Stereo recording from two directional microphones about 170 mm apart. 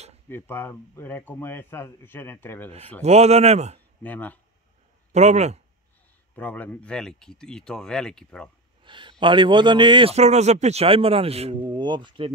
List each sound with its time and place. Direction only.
0.3 s speech: 10° left (ahead or behind)
3.0 s a man's voice: 40° right (ahead or behind)
4.0 s speech: 10° left (ahead or behind)
5.1 s a man's voice: 40° right (ahead or behind)
6.3 s speech: 10° left (ahead or behind)
8.8 s a man's voice: 30° right (ahead or behind)